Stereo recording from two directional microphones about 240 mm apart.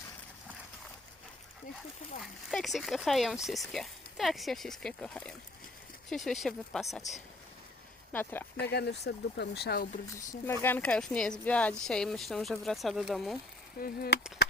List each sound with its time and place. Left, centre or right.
2.2 s speech: centre
8.6 s speech: left
10.2 s speech: centre
13.7 s speech: left